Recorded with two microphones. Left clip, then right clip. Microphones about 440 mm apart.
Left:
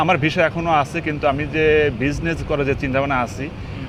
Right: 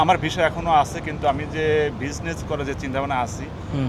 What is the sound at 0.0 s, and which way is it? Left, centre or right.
Speech, left.